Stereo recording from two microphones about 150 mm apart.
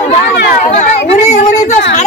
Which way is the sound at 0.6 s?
55° left (ahead or behind).